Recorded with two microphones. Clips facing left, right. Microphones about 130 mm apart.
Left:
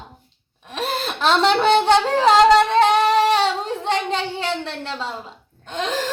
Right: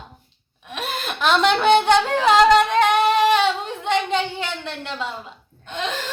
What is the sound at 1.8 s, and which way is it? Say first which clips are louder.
Singing: left 1 dB; 35° left (ahead or behind).